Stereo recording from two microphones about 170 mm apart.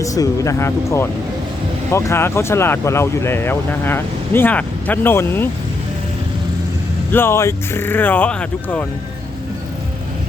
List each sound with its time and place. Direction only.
0.0 s speech: 20° left (ahead or behind)
7.1 s speech: 15° left (ahead or behind)